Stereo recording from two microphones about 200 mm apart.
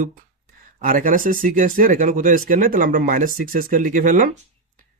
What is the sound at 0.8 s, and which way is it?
Speech, 45° right (ahead or behind).